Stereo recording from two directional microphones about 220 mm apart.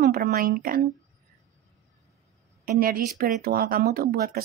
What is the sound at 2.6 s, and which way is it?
Speech, 40° right (ahead or behind).